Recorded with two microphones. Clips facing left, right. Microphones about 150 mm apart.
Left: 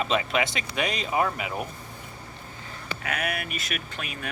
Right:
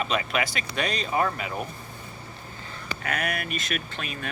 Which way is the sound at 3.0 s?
5° left (ahead or behind).